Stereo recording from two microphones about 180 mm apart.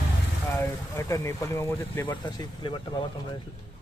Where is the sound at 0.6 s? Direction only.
15° left (ahead or behind).